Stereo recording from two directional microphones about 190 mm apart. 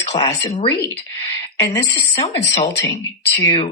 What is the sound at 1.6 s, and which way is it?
Speech, 20° left (ahead or behind).